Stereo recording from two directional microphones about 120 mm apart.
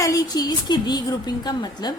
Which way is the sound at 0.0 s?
30° left (ahead or behind).